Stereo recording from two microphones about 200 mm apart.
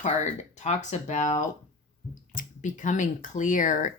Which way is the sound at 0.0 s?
35° left (ahead or behind).